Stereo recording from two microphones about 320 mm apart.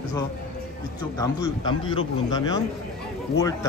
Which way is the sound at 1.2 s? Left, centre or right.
Centre.